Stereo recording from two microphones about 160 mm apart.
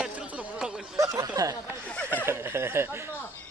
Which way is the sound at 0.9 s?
20° right (ahead or behind).